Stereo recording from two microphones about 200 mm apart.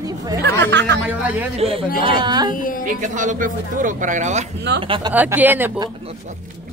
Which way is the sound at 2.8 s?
40° right (ahead or behind).